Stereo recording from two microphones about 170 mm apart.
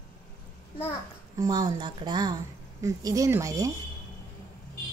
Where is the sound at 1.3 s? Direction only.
20° right (ahead or behind).